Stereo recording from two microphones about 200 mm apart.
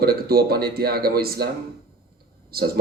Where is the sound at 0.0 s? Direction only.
50° right (ahead or behind).